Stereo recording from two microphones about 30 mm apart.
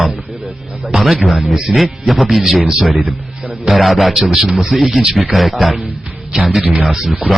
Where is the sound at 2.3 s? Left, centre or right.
Centre.